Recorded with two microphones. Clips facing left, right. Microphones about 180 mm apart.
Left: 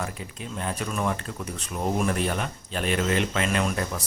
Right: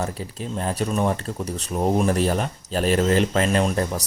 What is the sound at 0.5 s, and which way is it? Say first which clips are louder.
Speech: right 6 dB; 35° right (ahead or behind).